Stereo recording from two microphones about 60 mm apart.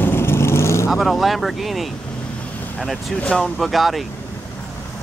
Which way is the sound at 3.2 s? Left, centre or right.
Centre.